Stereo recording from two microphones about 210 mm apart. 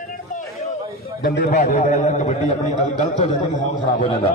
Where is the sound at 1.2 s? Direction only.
45° left (ahead or behind).